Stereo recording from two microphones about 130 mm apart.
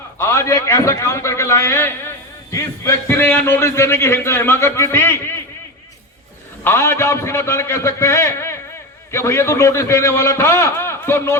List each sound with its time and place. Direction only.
0.2 s a man's voice: 20° left (ahead or behind)
6.7 s a man's voice: 20° left (ahead or behind)